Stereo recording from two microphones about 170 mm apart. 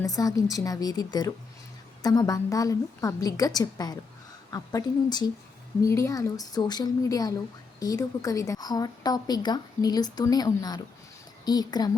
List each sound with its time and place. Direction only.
0.0 s a woman's voice: 20° left (ahead or behind)